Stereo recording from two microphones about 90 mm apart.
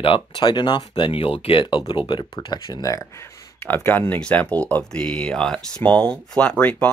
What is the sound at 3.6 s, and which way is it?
Speech, 20° left (ahead or behind).